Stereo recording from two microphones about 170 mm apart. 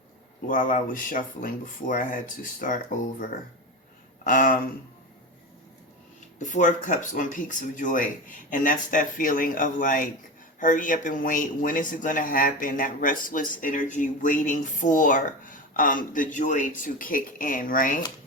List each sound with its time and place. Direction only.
0.4 s a man's voice: 50° left (ahead or behind)
6.4 s a man's voice: 50° left (ahead or behind)